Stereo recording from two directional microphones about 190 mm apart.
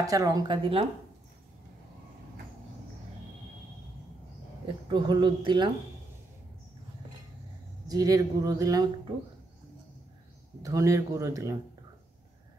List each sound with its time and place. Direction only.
0.0 s speech: 20° right (ahead or behind)
4.8 s speech: 20° right (ahead or behind)
7.9 s speech: 20° right (ahead or behind)
10.6 s speech: 15° right (ahead or behind)